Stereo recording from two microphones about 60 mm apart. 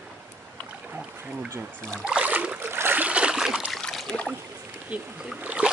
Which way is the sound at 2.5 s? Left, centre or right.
Right.